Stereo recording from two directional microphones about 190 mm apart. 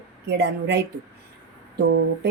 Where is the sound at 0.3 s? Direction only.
65° right (ahead or behind).